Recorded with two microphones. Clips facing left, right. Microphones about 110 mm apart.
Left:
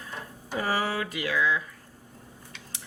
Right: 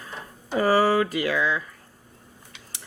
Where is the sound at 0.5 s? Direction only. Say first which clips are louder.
Right 8 dB; 50° right (ahead or behind).